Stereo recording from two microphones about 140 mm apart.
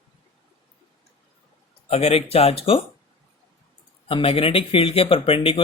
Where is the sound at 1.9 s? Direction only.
50° left (ahead or behind).